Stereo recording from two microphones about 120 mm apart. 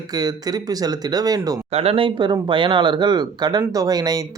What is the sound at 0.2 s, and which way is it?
Speech, 35° right (ahead or behind).